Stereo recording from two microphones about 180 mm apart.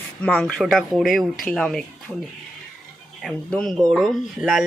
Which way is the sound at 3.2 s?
5° left (ahead or behind).